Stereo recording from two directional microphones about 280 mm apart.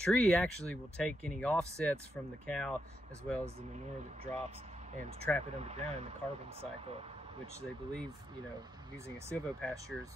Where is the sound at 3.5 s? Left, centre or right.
Right.